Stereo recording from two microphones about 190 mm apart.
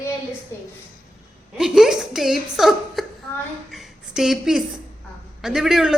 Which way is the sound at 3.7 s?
Centre (ahead or behind).